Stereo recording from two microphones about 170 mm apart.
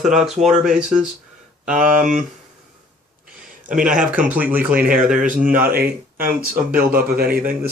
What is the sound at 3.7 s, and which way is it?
Speech, 5° right (ahead or behind).